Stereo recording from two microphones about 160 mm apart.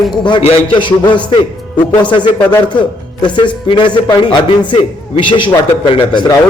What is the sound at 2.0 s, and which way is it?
A man's voice, 30° left (ahead or behind).